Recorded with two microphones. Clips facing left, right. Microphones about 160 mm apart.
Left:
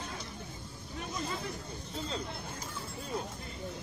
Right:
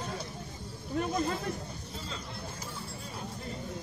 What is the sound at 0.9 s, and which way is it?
Speech, 55° right (ahead or behind).